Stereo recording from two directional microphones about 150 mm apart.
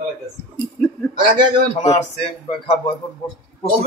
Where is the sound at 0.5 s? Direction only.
10° left (ahead or behind).